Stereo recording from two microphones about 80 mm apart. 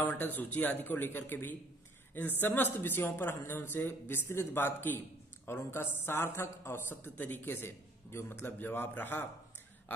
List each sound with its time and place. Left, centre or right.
0.0 s a man's voice: left